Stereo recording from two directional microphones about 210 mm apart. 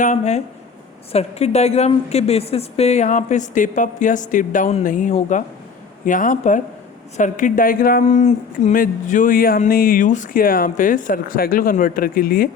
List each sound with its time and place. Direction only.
0.0 s speech: 35° left (ahead or behind)